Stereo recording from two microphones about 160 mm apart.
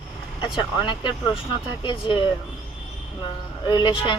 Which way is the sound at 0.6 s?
30° left (ahead or behind).